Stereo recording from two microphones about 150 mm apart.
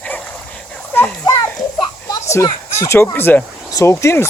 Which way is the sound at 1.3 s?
25° left (ahead or behind).